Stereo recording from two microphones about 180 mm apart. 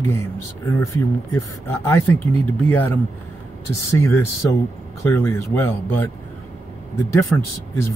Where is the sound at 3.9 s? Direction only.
15° left (ahead or behind).